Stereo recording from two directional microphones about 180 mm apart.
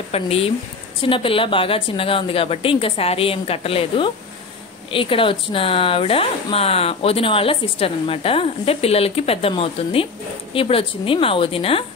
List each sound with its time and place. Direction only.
0.1 s speech: 35° left (ahead or behind)